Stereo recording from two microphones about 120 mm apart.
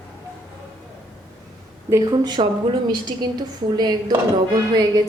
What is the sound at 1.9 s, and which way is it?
A woman's voice, 35° right (ahead or behind).